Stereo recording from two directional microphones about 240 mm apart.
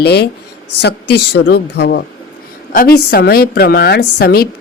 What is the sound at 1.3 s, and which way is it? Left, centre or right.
A woman's voice, left.